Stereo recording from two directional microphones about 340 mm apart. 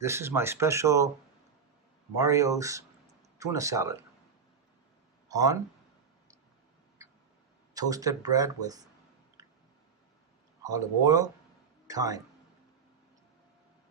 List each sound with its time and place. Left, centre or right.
0.0 s speech: centre
2.1 s speech: centre
3.1 s a sound: centre
5.3 s a man's voice: centre
7.7 s speech: centre
9.4 s a sound: centre
10.6 s speech: centre